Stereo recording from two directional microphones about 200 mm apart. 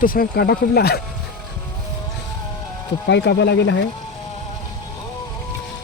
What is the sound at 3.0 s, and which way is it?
Speech, 60° left (ahead or behind).